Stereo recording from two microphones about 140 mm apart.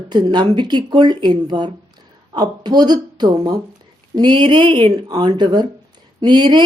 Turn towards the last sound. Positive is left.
turn(degrees=-30)  # may be behind; listen again after turning